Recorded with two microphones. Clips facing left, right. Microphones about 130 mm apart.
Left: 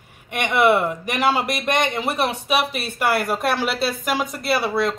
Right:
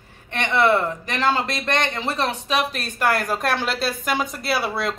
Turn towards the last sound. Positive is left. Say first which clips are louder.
# left 3 dB
turn(degrees=0)  # may be behind; listen again after turning